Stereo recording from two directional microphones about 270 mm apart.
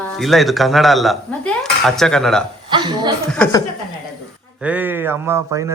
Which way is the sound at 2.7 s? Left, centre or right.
Centre.